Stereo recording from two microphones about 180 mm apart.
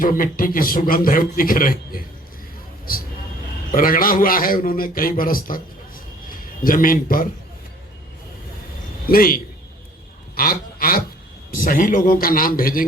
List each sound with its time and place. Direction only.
0.0 s a man's voice: 50° left (ahead or behind)
3.7 s a man's voice: 50° left (ahead or behind)
9.0 s a man's voice: 55° left (ahead or behind)
10.3 s a sound: 55° left (ahead or behind)
11.5 s a man's voice: 50° left (ahead or behind)